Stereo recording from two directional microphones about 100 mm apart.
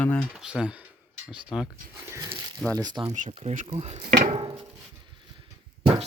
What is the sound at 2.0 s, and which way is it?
Speech, 30° right (ahead or behind).